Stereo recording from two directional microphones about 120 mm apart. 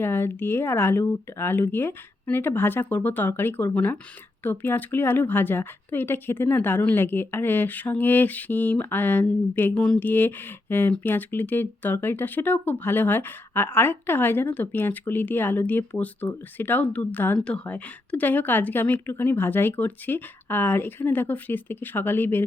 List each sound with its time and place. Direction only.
0.0 s speech: 20° left (ahead or behind)